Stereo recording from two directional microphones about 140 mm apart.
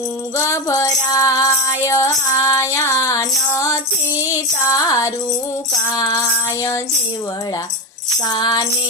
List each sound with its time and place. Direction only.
0.3 s music: 20° left (ahead or behind)
8.3 s music: 30° left (ahead or behind)